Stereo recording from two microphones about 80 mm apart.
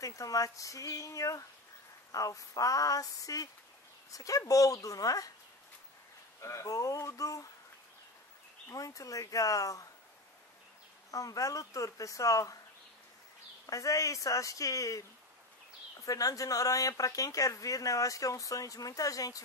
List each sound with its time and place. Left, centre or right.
0.0 s speech: left
6.4 s speech: left
8.6 s speech: left
11.1 s speech: left
13.7 s speech: left
16.1 s speech: left